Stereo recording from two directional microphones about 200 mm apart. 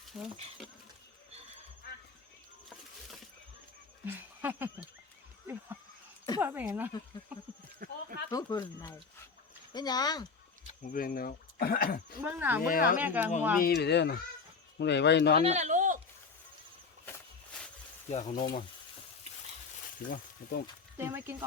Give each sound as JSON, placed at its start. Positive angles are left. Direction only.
{"t": 4.0, "sound": "a sound", "side_deg": -10}
{"t": 6.4, "sound": "speech", "side_deg": -10}
{"t": 7.8, "sound": "a sound", "side_deg": -40}
{"t": 8.3, "sound": "speech", "side_deg": 20}
{"t": 10.7, "sound": "speech", "side_deg": 40}
{"t": 12.2, "sound": "speech", "side_deg": -10}
{"t": 12.6, "sound": "speech", "side_deg": 45}
{"t": 13.0, "sound": "speech", "side_deg": -10}
{"t": 13.6, "sound": "speech", "side_deg": 50}
{"t": 15.4, "sound": "speech", "side_deg": -35}
{"t": 18.1, "sound": "speech", "side_deg": 35}
{"t": 20.1, "sound": "speech", "side_deg": 45}
{"t": 21.0, "sound": "speech", "side_deg": -10}